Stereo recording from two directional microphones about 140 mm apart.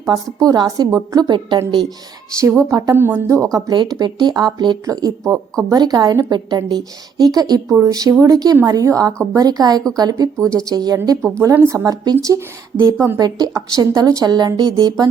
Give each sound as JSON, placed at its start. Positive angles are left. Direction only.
{"t": 0.3, "sound": "a woman's voice", "side_deg": -30}
{"t": 2.4, "sound": "a woman's voice", "side_deg": -20}